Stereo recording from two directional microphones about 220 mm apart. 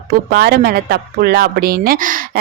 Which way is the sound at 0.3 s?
45° right (ahead or behind).